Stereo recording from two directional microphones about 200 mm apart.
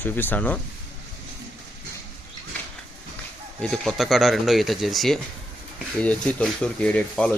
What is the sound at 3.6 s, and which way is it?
Speech, 5° left (ahead or behind).